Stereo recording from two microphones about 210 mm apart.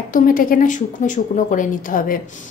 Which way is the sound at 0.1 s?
40° left (ahead or behind).